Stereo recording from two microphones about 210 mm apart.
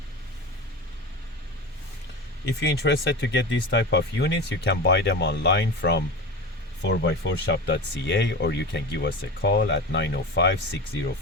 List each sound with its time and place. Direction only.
2.4 s speech: 50° left (ahead or behind)